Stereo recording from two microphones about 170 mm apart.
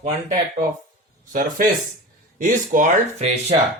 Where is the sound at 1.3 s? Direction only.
55° right (ahead or behind).